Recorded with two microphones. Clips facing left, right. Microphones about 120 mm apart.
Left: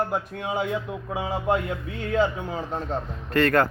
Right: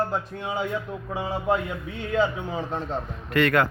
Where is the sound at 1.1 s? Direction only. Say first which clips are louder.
Even; 5° left (ahead or behind).